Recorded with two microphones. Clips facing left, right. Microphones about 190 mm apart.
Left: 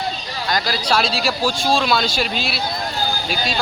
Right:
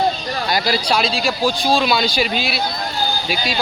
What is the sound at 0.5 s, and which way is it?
Speech, 5° right (ahead or behind).